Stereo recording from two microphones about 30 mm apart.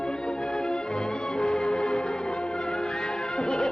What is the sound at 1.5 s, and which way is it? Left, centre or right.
Music, left.